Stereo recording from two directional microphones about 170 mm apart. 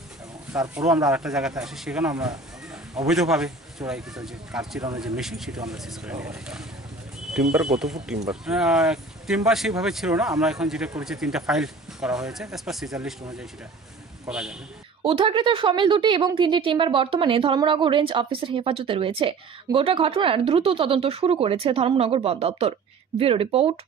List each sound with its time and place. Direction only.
0.5 s speech: 10° right (ahead or behind)
14.3 s speech: 5° right (ahead or behind)
15.0 s a woman's voice: 30° right (ahead or behind)